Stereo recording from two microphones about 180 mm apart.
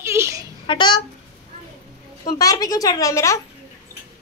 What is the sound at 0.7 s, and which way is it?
Speech, 25° left (ahead or behind).